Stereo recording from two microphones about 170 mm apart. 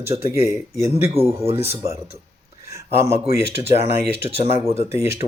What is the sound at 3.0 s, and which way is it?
Speech, 20° right (ahead or behind).